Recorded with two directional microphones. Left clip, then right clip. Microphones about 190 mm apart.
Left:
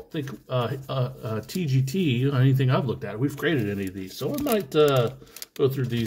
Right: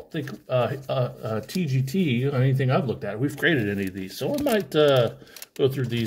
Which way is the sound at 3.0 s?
5° right (ahead or behind).